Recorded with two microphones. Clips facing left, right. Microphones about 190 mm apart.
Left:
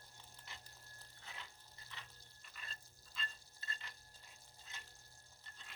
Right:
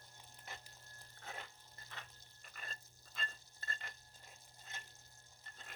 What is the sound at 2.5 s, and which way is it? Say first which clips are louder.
Frying: right 3 dB; 50° right (ahead or behind).